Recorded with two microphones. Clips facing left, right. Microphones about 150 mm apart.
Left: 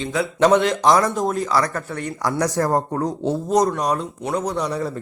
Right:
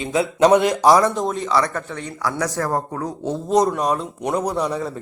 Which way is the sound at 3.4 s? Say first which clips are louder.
Right 2 dB; centre (ahead or behind).